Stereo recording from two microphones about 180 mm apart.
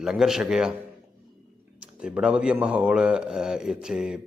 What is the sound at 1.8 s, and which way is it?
A man's voice, 5° right (ahead or behind).